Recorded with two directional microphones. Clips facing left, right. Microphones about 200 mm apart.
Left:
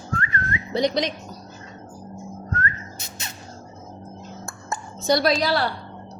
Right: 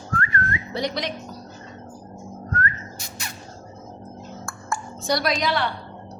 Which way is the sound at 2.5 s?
25° left (ahead or behind).